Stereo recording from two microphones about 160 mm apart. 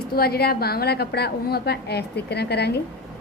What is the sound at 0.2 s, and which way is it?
A woman's voice, 75° left (ahead or behind).